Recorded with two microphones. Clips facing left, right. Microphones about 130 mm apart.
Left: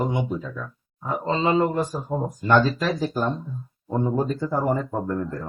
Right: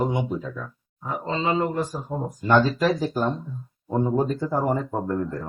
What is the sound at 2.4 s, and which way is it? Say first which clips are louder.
Speech: right 1 dB; 10° right (ahead or behind).